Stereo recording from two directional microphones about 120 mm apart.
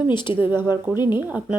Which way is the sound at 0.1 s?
40° left (ahead or behind).